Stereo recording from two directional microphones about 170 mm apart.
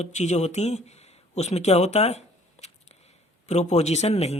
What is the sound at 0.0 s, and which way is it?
A man's voice, 45° left (ahead or behind).